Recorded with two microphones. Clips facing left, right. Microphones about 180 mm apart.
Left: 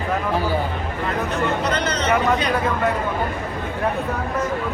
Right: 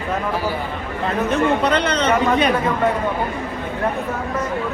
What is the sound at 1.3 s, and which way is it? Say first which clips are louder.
Speech: right 7 dB; 60° right (ahead or behind).